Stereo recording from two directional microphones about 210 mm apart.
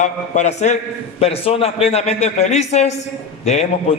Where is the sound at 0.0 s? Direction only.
35° left (ahead or behind).